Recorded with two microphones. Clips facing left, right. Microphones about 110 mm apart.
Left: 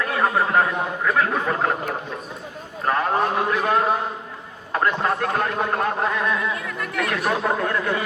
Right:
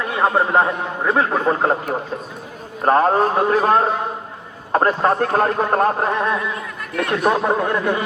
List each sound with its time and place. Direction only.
0.0 s a man's voice: 25° right (ahead or behind)
2.8 s a man's voice: 35° right (ahead or behind); by 7.9 s 20° right (ahead or behind)